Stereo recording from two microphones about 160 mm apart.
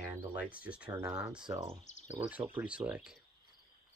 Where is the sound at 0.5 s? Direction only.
10° right (ahead or behind).